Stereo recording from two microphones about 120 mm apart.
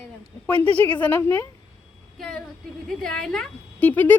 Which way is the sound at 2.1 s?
5° left (ahead or behind).